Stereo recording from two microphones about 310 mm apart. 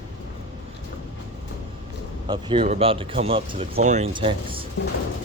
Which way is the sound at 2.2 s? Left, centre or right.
Centre.